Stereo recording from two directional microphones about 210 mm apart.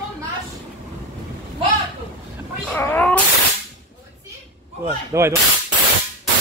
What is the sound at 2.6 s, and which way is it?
Speech, 10° left (ahead or behind).